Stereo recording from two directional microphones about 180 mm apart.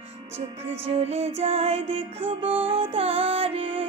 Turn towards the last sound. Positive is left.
turn(degrees=-30)  # may be behind; listen again after turning